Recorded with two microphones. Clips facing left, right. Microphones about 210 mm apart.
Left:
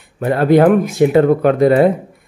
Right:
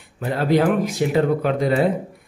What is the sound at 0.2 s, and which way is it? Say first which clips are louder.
Speech: left 7 dB; 55° left (ahead or behind).